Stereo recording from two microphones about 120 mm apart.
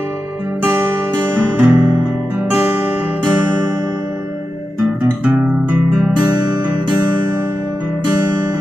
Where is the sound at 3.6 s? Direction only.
20° right (ahead or behind).